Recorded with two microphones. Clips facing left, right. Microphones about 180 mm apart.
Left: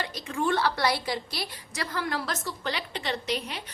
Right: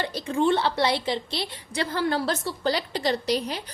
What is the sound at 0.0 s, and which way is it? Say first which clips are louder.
A woman's voice: right 6 dB; 30° right (ahead or behind).